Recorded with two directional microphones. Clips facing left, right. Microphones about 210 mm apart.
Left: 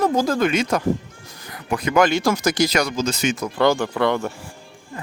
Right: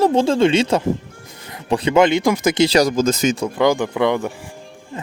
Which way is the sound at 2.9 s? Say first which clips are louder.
Right 5 dB; 45° right (ahead or behind).